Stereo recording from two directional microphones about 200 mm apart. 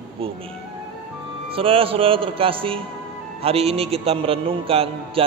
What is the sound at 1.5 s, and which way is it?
A man's voice, 30° right (ahead or behind).